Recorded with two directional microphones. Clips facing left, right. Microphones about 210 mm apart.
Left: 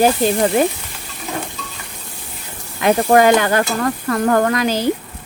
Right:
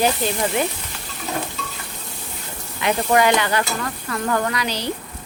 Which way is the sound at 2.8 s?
45° left (ahead or behind).